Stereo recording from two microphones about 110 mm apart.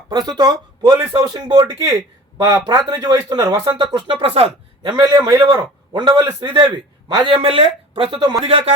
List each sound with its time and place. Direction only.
0.1 s speech: 40° right (ahead or behind)
3.9 s speech: 50° right (ahead or behind)
7.3 s speech: 60° right (ahead or behind)